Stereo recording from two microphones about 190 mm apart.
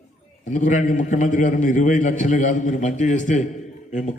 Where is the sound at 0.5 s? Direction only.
40° left (ahead or behind).